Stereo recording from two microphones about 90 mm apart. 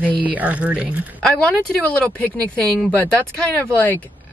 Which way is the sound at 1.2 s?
10° left (ahead or behind).